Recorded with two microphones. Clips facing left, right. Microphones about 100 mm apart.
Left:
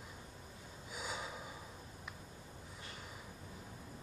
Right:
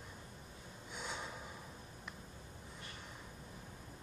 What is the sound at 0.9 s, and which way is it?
Gasp, 5° left (ahead or behind).